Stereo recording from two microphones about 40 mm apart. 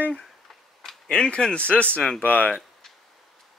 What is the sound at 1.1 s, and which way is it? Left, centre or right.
Speech, left.